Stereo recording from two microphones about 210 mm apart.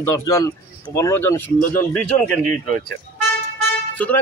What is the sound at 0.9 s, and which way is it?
A man's voice, 15° left (ahead or behind).